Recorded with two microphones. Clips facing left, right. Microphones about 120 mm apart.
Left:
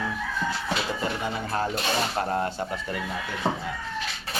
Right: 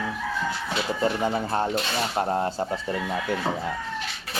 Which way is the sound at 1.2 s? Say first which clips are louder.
Right 3 dB; 30° right (ahead or behind).